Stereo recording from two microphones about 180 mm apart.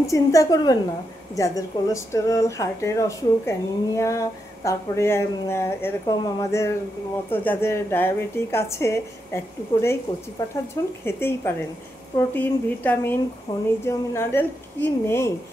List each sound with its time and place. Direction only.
0.0 s speech: 15° left (ahead or behind)
13.5 s speech: 25° left (ahead or behind)